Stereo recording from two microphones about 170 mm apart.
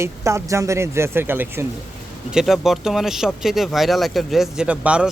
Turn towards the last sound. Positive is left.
turn(degrees=-5)  # may be behind; listen again after turning